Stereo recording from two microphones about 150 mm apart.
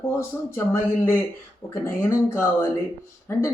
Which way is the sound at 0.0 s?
20° left (ahead or behind).